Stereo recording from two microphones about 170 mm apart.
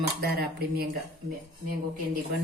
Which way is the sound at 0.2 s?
65° right (ahead or behind).